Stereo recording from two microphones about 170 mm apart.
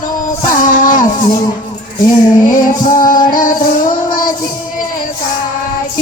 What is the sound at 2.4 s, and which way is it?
Music, 50° left (ahead or behind).